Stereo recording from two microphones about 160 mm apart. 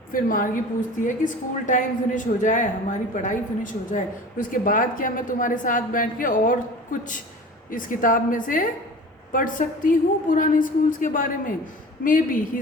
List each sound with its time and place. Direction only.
0.1 s a woman's voice: 60° left (ahead or behind)